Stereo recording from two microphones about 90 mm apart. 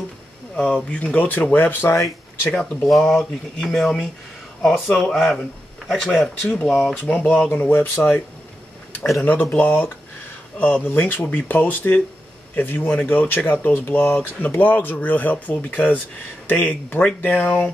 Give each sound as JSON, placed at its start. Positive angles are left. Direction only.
{"t": 0.6, "sound": "speech", "side_deg": 10}
{"t": 2.5, "sound": "speech", "side_deg": 5}
{"t": 6.9, "sound": "speech", "side_deg": 15}
{"t": 9.2, "sound": "speech", "side_deg": 20}